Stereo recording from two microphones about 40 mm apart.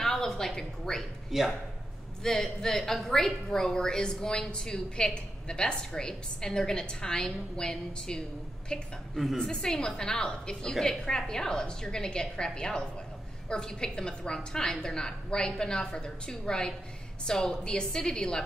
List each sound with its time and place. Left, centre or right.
0.0 s a woman's voice: centre
1.3 s speech: centre
2.2 s a woman's voice: centre
9.1 s a woman's voice: centre
9.4 s a woman's voice: centre